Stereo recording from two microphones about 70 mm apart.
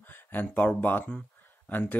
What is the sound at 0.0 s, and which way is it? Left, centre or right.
Speech, left.